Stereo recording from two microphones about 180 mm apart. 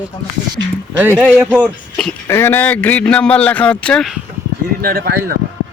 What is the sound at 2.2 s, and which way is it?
Speech, 15° left (ahead or behind).